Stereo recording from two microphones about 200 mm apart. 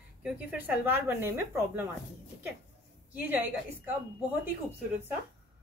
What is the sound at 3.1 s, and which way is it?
Speech, 10° right (ahead or behind).